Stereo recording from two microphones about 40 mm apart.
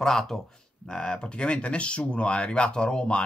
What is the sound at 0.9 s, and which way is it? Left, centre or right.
Speech, left.